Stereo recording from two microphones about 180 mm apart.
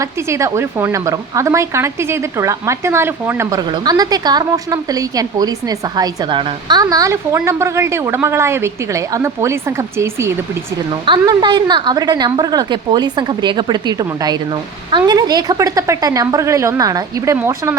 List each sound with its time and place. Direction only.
0.0 s a woman's voice: 15° right (ahead or behind)
11.0 s a woman's voice: 25° right (ahead or behind)